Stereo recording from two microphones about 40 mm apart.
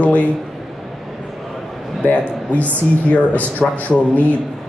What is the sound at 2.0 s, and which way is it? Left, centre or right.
A man's voice, left.